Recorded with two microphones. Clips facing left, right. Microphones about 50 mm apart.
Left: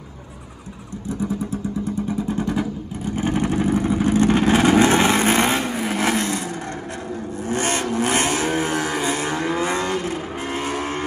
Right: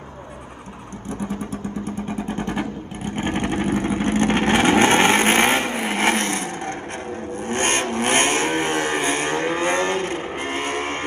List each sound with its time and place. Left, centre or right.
1.3 s vehicle: right